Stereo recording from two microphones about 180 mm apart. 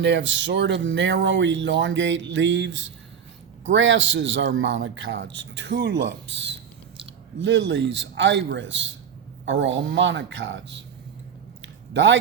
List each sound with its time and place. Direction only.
0.0 s a man's voice: 85° right
11.9 s a man's voice: 90° right